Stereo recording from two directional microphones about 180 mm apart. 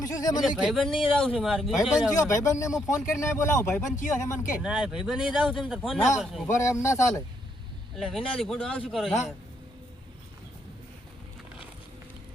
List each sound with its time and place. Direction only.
0.0 s speech: 20° left (ahead or behind)
0.4 s speech: centre (ahead or behind)
2.1 s speech: 15° left (ahead or behind)
4.6 s speech: 5° right (ahead or behind)
6.6 s speech: 15° left (ahead or behind)
7.9 s speech: centre (ahead or behind)